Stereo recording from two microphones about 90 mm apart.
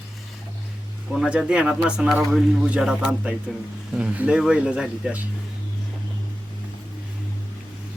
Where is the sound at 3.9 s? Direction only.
15° right (ahead or behind).